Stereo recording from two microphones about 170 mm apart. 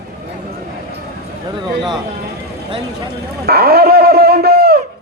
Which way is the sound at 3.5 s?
65° right (ahead or behind).